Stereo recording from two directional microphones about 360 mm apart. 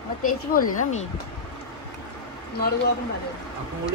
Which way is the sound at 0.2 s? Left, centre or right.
Left.